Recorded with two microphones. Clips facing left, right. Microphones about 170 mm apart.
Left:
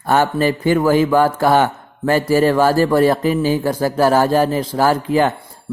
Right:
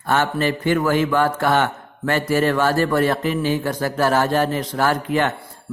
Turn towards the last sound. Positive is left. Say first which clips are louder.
# left 4 dB
turn(degrees=35)  # may be behind; listen again after turning